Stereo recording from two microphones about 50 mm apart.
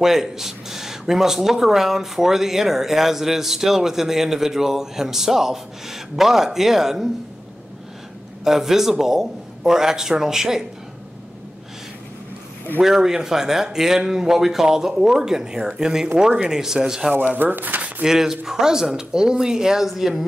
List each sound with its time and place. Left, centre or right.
0.0 s speech: centre
8.5 s speech: centre
12.8 s speech: centre
17.4 s speech: right
18.0 s speech: centre